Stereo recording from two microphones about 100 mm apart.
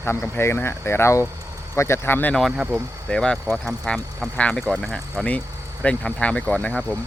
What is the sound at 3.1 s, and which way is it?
Speech, 10° left (ahead or behind).